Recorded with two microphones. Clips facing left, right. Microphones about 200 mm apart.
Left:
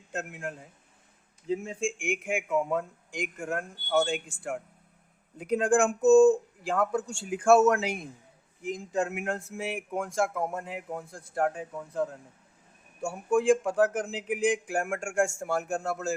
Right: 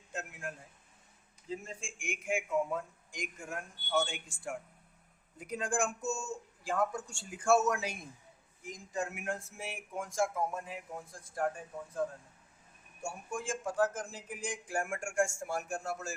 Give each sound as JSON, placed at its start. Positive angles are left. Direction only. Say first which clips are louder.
{"t": 0.1, "sound": "a man's voice", "louder": "left 6 dB", "side_deg": 70}